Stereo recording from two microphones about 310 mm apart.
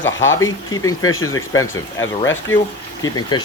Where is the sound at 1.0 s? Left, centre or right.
Left.